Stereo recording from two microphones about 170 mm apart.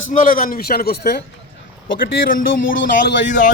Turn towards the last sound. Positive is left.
turn(degrees=50)  # may be behind; listen again after turning